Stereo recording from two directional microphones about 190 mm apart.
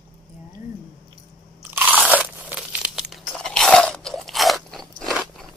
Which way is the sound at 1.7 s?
10° right (ahead or behind).